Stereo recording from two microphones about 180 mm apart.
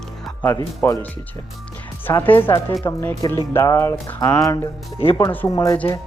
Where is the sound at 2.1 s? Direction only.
10° left (ahead or behind).